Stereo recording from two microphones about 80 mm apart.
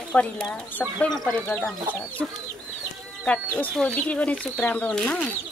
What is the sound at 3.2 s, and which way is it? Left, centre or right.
Speech, centre.